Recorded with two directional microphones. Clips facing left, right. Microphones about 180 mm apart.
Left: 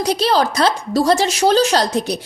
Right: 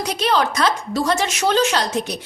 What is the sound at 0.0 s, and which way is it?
A woman's voice, 35° left (ahead or behind).